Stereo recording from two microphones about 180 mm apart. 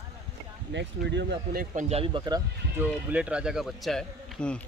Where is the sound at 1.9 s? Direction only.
30° right (ahead or behind).